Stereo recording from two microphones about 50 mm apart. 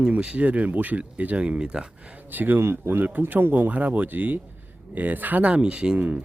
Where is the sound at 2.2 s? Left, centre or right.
Right.